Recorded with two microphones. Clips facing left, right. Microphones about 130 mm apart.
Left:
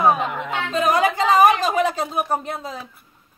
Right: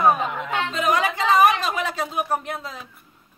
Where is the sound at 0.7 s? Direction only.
40° left (ahead or behind).